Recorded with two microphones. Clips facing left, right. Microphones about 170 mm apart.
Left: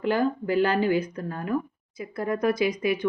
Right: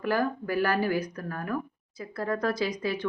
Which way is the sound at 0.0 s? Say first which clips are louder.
Left 3 dB; 20° left (ahead or behind).